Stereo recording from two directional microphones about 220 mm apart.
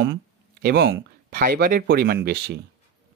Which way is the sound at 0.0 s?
45° right (ahead or behind).